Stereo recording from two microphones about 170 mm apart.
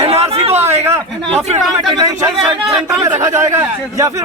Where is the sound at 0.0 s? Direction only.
35° right (ahead or behind).